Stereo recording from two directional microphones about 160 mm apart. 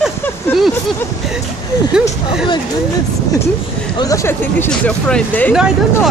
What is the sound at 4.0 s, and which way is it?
Speech, 20° left (ahead or behind).